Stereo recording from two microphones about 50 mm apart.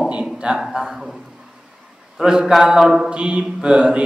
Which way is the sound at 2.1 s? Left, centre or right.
Centre.